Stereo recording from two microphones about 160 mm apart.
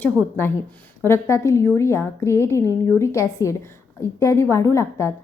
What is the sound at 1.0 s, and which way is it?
A woman's voice, 15° left (ahead or behind).